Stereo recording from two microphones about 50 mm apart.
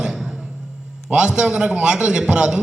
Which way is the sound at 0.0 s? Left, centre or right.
Centre.